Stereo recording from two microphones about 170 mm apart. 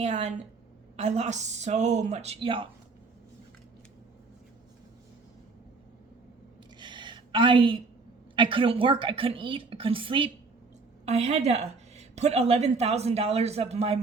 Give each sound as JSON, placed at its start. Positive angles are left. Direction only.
{"t": 0.0, "sound": "a woman's voice", "side_deg": -40}
{"t": 6.7, "sound": "a sound", "side_deg": -25}
{"t": 8.4, "sound": "a woman's voice", "side_deg": -30}